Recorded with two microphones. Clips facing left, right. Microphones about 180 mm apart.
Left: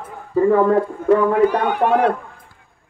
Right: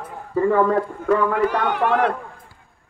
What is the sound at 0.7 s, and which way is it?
Speech, 25° left (ahead or behind).